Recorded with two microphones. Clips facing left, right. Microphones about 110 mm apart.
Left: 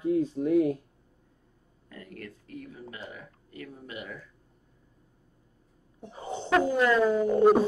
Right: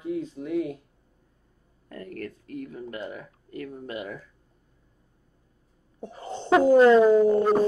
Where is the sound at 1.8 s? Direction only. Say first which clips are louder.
Right 7 dB; 45° right (ahead or behind).